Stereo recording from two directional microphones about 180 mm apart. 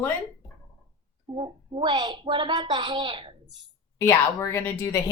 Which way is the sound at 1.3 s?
30° right (ahead or behind).